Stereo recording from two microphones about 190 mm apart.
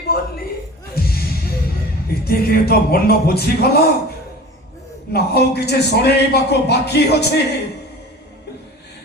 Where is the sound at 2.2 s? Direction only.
55° left (ahead or behind).